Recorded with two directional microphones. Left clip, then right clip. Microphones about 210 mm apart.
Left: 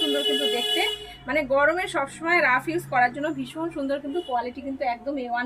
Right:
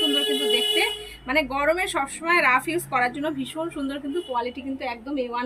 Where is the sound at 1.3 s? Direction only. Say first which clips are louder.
Left 1 dB; 15° left (ahead or behind).